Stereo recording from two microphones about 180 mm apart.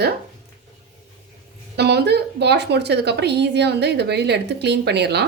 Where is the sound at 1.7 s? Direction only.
65° right (ahead or behind).